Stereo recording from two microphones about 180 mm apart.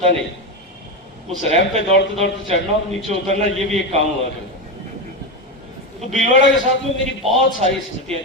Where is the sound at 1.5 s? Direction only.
35° right (ahead or behind).